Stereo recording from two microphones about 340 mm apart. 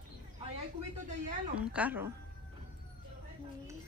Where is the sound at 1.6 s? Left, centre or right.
Centre.